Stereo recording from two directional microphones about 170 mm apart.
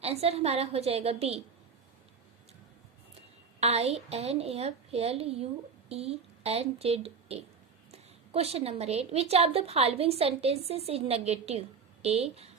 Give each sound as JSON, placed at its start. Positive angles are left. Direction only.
{"t": 0.0, "sound": "a woman's voice", "side_deg": -35}
{"t": 3.6, "sound": "a woman's voice", "side_deg": -40}